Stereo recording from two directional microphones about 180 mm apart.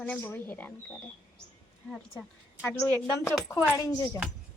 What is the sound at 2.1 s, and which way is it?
A woman's voice, 10° left (ahead or behind).